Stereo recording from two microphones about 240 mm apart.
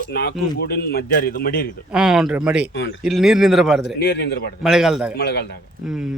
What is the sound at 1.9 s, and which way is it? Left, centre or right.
Speech, centre.